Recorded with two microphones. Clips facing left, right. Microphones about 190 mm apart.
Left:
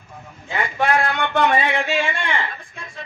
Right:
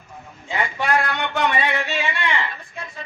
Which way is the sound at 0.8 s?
50° left (ahead or behind).